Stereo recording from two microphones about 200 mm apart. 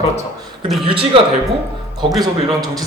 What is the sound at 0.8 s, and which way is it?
Speech, 25° right (ahead or behind).